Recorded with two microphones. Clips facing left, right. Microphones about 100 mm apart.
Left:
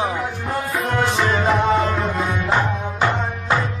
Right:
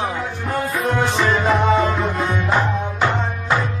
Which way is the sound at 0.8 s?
Centre (ahead or behind).